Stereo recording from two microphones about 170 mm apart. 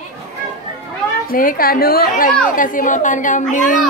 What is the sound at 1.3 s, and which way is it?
A woman's voice, 55° left (ahead or behind).